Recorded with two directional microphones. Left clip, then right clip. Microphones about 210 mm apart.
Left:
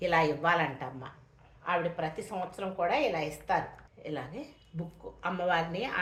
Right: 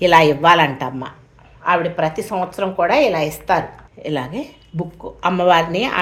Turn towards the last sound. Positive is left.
turn(degrees=-50)  # may be behind; listen again after turning